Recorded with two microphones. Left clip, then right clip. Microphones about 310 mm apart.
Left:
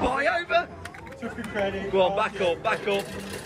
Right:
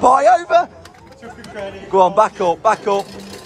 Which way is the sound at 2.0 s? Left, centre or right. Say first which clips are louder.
Right 11 dB; right.